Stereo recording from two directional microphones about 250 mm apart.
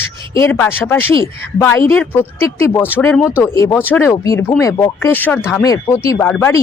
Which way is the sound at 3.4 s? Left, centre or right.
Centre.